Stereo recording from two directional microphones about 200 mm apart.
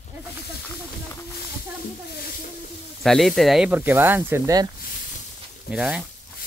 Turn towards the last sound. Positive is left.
turn(degrees=-5)  # may be behind; listen again after turning